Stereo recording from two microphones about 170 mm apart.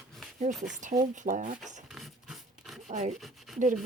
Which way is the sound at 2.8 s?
45° right (ahead or behind).